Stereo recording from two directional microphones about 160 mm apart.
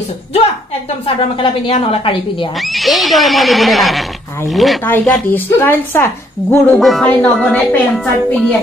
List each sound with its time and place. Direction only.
1.0 s a woman's voice: 35° left (ahead or behind)
2.7 s a woman's voice: centre (ahead or behind)
4.8 s a woman's voice: 10° left (ahead or behind)
6.8 s a woman's voice: centre (ahead or behind)